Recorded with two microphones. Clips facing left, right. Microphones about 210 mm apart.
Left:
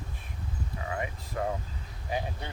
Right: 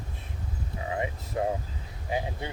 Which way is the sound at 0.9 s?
20° right (ahead or behind).